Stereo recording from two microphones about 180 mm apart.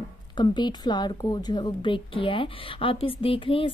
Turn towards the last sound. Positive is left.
turn(degrees=30)  # may be behind; listen again after turning